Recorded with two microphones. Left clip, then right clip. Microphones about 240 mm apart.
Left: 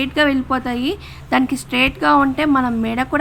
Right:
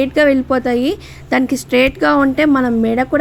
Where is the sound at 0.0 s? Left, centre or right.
Centre.